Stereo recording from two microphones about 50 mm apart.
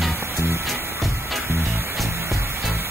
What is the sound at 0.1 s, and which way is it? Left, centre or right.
Music, right.